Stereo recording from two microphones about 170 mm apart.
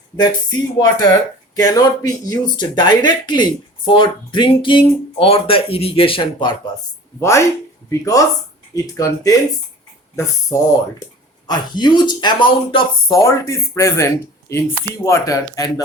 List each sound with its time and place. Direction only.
0.2 s speech: 25° left (ahead or behind)
7.2 s speech: 15° left (ahead or behind)
11.4 s speech: 25° left (ahead or behind)